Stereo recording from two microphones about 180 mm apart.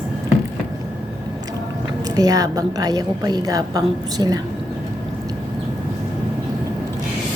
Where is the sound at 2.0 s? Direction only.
20° right (ahead or behind).